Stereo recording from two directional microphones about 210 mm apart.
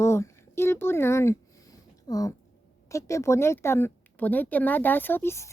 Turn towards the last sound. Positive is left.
turn(degrees=10)  # may be behind; listen again after turning